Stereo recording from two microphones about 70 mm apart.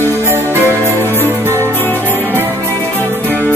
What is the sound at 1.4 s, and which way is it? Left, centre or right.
Music, right.